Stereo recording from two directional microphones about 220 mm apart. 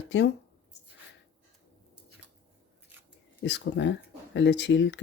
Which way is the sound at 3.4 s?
55° left (ahead or behind).